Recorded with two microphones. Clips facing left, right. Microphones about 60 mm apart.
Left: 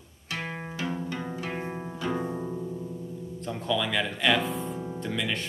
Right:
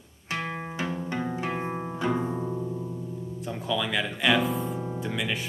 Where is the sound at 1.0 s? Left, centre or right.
Right.